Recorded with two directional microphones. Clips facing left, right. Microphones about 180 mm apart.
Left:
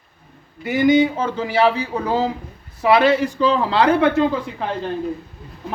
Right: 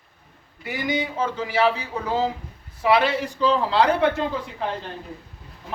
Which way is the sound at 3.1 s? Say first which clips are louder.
Left 5 dB; 80° left.